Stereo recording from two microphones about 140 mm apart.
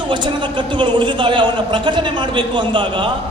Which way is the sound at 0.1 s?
35° right (ahead or behind).